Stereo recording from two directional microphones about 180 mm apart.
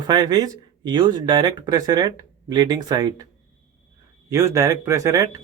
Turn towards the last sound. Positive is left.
turn(degrees=-15)  # may be behind; listen again after turning